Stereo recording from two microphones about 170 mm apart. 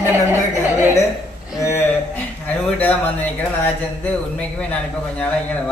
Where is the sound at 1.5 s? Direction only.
15° left (ahead or behind).